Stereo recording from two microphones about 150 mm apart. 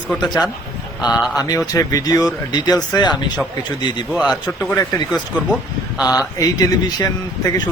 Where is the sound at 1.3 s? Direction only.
25° left (ahead or behind).